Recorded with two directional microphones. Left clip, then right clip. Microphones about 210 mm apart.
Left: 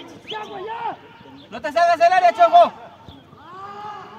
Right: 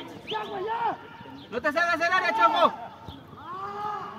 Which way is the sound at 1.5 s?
50° left (ahead or behind).